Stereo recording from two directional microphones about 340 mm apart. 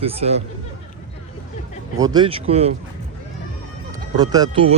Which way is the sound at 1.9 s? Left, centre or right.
Centre.